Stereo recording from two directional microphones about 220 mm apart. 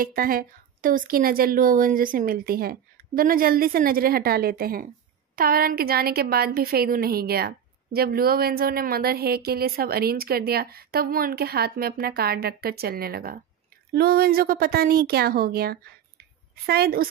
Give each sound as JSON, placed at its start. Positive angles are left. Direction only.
{"t": 0.0, "sound": "a woman's voice", "side_deg": -40}